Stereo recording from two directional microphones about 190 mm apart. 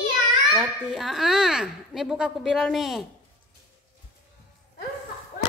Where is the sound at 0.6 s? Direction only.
Centre (ahead or behind).